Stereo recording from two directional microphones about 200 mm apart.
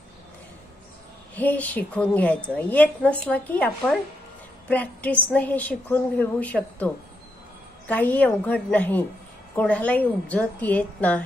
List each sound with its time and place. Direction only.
1.3 s a woman's voice: 10° left (ahead or behind)